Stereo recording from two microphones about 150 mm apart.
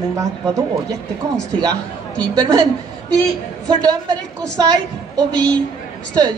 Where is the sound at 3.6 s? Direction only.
25° right (ahead or behind).